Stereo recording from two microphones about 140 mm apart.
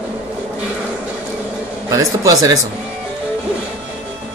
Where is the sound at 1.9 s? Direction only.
25° right (ahead or behind).